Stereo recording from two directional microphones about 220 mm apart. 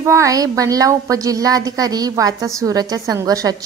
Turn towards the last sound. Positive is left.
turn(degrees=-15)  # may be behind; listen again after turning